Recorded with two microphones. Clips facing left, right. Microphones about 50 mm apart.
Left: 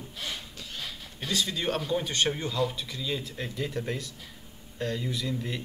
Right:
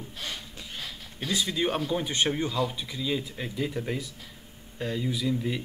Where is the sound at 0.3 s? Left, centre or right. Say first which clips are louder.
Even; centre.